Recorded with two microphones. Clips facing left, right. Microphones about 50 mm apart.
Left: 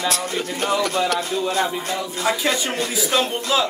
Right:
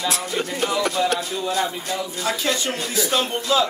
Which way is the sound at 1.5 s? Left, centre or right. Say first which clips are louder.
Left 2 dB; left.